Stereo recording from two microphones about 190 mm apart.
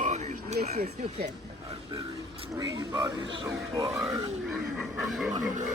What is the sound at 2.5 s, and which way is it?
Speech, 15° right (ahead or behind).